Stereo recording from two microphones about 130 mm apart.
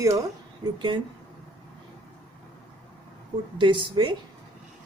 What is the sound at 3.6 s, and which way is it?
Speech, 40° right (ahead or behind).